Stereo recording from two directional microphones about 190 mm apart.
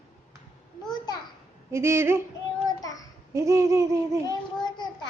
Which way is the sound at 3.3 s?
15° right (ahead or behind).